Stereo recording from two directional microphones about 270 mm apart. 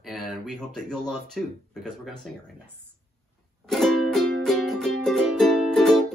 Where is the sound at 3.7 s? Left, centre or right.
Centre.